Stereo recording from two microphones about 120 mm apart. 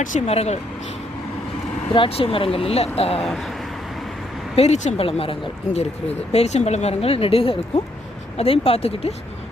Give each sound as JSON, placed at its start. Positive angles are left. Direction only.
{"t": 0.0, "sound": "speech", "side_deg": 75}
{"t": 1.9, "sound": "speech", "side_deg": 50}
{"t": 3.2, "sound": "speech", "side_deg": 0}
{"t": 4.5, "sound": "speech", "side_deg": 65}
{"t": 5.0, "sound": "speech", "side_deg": 50}